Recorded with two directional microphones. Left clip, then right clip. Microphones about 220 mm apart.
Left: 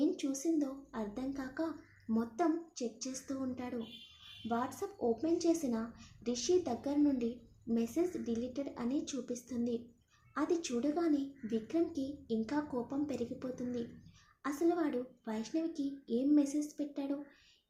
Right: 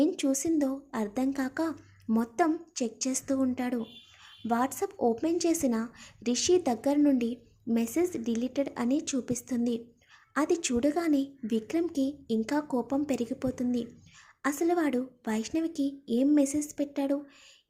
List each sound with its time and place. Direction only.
0.0 s speech: 40° right (ahead or behind)